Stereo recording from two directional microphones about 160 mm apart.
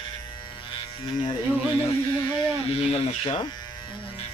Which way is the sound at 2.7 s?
35° left (ahead or behind).